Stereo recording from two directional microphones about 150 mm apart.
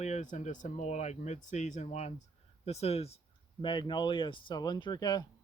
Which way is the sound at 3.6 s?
30° left (ahead or behind).